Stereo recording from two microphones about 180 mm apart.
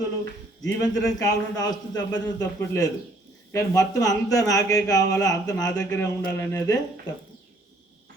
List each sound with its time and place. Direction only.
0.8 s a man's voice: 20° left (ahead or behind)